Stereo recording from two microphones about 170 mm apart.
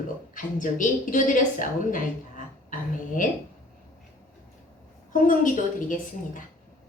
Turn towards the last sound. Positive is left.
turn(degrees=50)  # may be behind; listen again after turning